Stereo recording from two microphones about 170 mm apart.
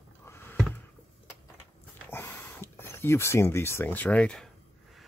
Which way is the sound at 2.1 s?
15° left (ahead or behind).